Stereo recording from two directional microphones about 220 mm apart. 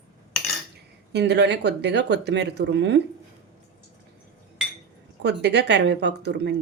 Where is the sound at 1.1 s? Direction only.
50° right (ahead or behind).